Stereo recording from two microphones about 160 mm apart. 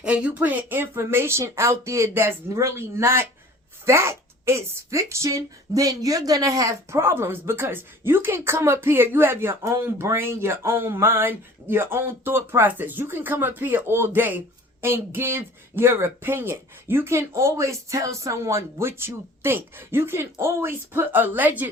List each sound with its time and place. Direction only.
0.0 s a woman's voice: 5° right (ahead or behind)